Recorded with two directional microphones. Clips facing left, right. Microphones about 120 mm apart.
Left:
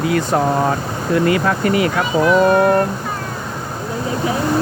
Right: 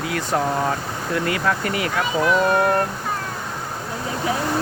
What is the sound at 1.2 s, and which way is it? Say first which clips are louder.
Speech: left 6 dB; 10° left (ahead or behind).